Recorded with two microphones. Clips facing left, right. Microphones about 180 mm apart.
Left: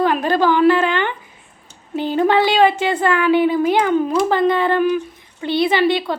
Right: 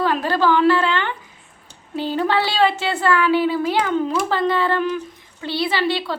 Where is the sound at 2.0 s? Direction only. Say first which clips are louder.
Left 4 dB; 20° left (ahead or behind).